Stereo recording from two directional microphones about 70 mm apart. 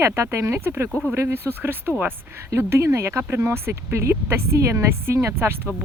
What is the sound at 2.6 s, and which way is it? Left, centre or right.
Speech, right.